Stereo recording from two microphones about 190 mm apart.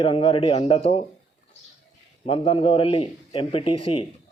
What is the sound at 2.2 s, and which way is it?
Speech, 30° left (ahead or behind).